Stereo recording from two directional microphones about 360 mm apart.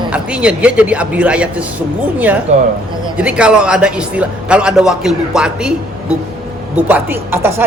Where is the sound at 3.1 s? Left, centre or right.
Centre.